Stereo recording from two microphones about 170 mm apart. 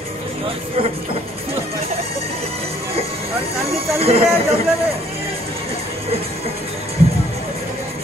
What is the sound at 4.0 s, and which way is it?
Speech, 35° right (ahead or behind).